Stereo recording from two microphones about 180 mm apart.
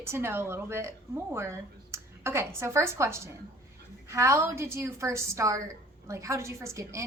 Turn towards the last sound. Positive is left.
turn(degrees=-15)  # may be behind; listen again after turning